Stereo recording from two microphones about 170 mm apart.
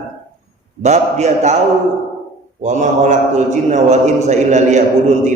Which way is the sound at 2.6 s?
45° right (ahead or behind).